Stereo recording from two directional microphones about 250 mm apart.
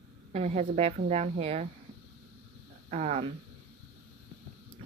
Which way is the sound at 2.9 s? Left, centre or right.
Right.